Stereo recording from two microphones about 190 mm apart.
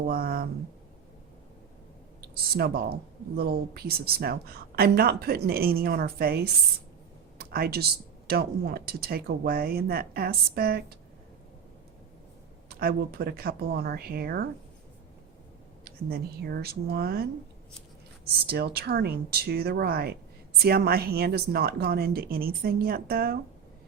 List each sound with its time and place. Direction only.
0.1 s speech: 50° right (ahead or behind)
2.3 s speech: 55° right (ahead or behind)
12.6 s speech: 55° right (ahead or behind)
15.8 s speech: 55° right (ahead or behind)
18.4 s speech: 55° right (ahead or behind)